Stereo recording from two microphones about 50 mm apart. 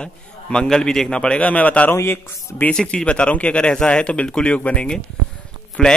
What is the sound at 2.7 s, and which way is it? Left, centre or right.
A man's voice, centre.